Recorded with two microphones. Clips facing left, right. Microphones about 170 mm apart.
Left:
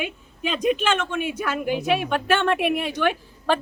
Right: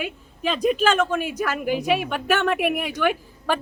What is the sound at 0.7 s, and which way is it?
Speech, 40° right (ahead or behind).